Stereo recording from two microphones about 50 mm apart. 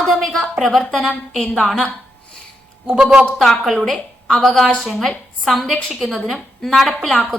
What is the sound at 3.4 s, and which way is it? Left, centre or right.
A woman's voice, centre.